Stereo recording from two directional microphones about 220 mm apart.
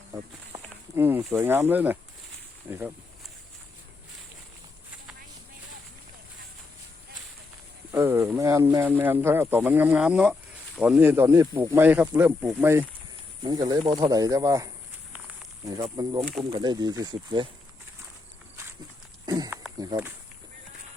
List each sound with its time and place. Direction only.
0.1 s speech: 15° right (ahead or behind)
7.9 s speech: 10° right (ahead or behind)
19.2 s a sound: 15° right (ahead or behind)
19.8 s speech: 15° right (ahead or behind)